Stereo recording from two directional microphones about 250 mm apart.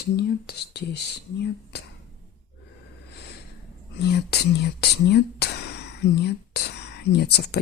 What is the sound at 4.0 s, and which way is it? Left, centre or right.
Speech, left.